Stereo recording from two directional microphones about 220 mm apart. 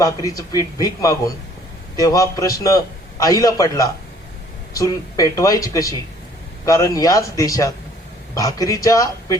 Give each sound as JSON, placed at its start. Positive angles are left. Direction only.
{"t": 0.0, "sound": "a man's voice", "side_deg": 15}